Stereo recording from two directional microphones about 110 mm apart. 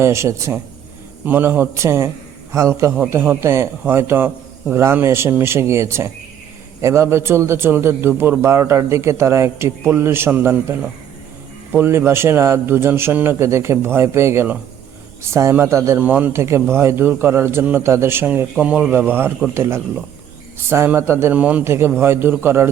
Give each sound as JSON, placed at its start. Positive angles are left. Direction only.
{"t": 0.0, "sound": "a man's voice", "side_deg": -25}
{"t": 16.0, "sound": "a man's voice", "side_deg": -15}